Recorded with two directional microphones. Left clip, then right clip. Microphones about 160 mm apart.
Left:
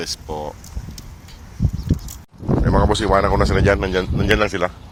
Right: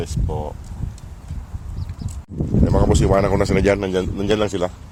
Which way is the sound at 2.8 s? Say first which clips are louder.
Left 1 dB; 35° right (ahead or behind).